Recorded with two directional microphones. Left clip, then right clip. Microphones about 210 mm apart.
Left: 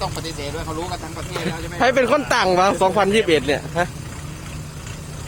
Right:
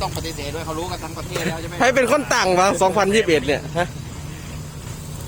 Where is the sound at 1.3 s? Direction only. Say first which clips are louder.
Right 1 dB; centre (ahead or behind).